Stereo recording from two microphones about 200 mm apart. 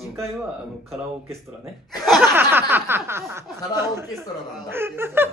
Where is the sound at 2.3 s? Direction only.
10° right (ahead or behind).